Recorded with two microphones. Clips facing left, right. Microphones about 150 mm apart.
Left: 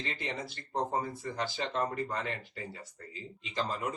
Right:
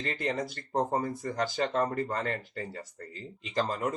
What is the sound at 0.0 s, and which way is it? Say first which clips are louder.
Speech: right 6 dB; 45° right (ahead or behind).